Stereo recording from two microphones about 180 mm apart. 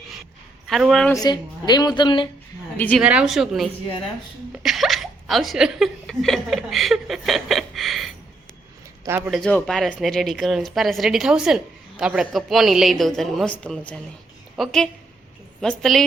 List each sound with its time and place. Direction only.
0.7 s speech: centre (ahead or behind)
1.1 s a woman's voice: 20° left (ahead or behind)
2.7 s a woman's voice: 10° left (ahead or behind)
3.0 s speech: 5° right (ahead or behind)
9.0 s speech: 10° right (ahead or behind)
9.3 s a woman's voice: 5° left (ahead or behind)